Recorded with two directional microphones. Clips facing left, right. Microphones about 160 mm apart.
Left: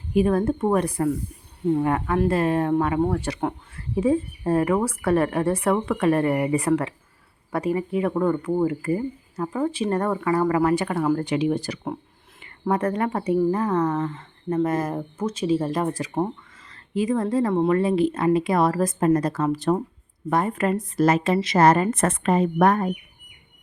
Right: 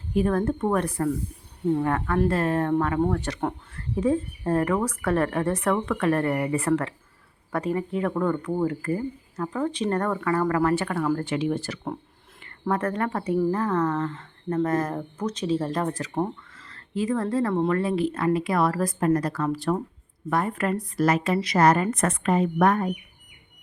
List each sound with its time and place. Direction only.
0.1 s a woman's voice: 10° left (ahead or behind); by 22.9 s 35° left (ahead or behind)